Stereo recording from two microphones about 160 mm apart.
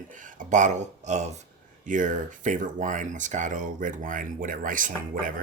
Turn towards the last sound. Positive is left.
turn(degrees=-55)  # may be behind; listen again after turning